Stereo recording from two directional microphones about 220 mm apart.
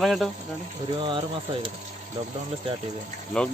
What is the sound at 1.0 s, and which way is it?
Speech, 25° right (ahead or behind).